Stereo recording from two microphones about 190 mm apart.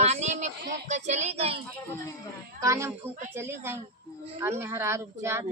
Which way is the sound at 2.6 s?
15° right (ahead or behind).